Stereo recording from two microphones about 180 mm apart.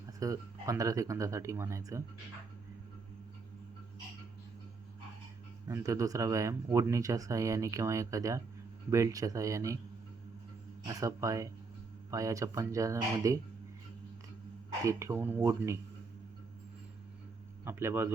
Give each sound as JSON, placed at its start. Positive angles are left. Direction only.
{"t": 0.2, "sound": "speech", "side_deg": -15}
{"t": 5.6, "sound": "speech", "side_deg": -15}
{"t": 10.8, "sound": "speech", "side_deg": -15}
{"t": 14.8, "sound": "speech", "side_deg": -15}
{"t": 17.7, "sound": "speech", "side_deg": -15}